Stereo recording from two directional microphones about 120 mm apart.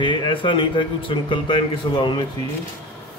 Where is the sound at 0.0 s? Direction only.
45° left (ahead or behind).